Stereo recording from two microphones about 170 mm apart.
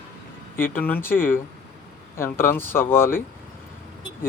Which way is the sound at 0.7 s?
10° left (ahead or behind).